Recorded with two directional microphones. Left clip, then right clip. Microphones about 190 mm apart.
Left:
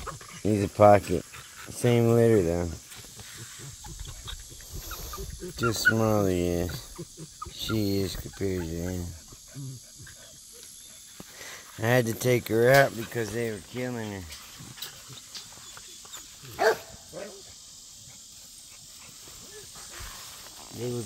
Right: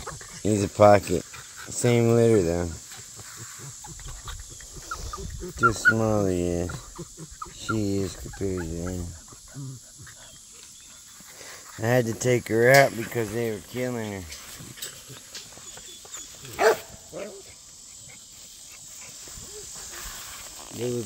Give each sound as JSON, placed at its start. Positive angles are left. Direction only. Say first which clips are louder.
{"t": 0.4, "sound": "speech", "louder": "right 2 dB", "side_deg": 0}
{"t": 4.3, "sound": "a sound", "louder": "left 1 dB", "side_deg": 5}
{"t": 7.5, "sound": "speech", "louder": "right 1 dB", "side_deg": 0}
{"t": 11.3, "sound": "speech", "louder": "right 1 dB", "side_deg": 0}
{"t": 13.1, "sound": "speech", "louder": "right 3 dB", "side_deg": -20}
{"t": 16.5, "sound": "dog", "louder": "right 3 dB", "side_deg": -45}